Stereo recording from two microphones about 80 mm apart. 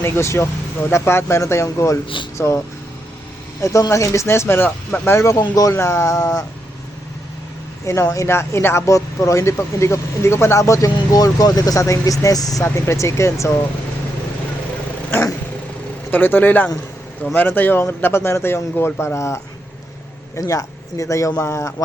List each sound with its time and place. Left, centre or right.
0.0 s speech: left
5.4 s speech: left
5.7 s speech: left
8.1 s speech: left
12.6 s speech: left
16.1 s speech: left